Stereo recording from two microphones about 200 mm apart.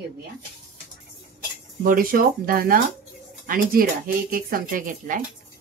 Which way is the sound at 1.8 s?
45° right (ahead or behind).